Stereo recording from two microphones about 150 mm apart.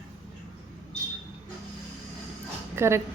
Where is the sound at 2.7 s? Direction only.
15° right (ahead or behind).